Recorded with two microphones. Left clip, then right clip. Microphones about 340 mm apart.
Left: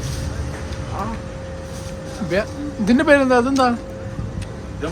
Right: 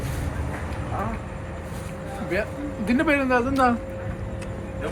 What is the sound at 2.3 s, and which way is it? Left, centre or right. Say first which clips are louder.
Speech: left 5 dB; left.